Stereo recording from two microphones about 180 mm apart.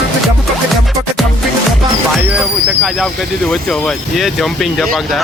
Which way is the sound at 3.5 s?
5° left (ahead or behind).